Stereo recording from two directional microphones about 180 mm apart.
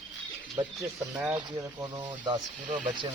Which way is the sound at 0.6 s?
20° right (ahead or behind).